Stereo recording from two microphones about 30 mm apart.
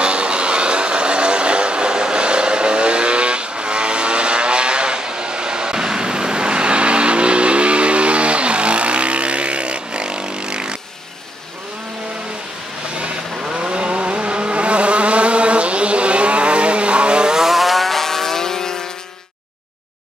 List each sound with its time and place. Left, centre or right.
0.0 s vehicle: right
13.6 s vehicle: right
17.3 s vehicle: centre
17.6 s vehicle: centre